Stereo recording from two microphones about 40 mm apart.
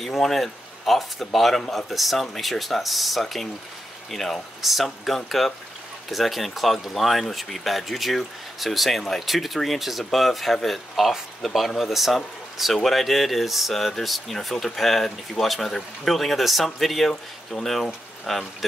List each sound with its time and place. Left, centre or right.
0.0 s speech: centre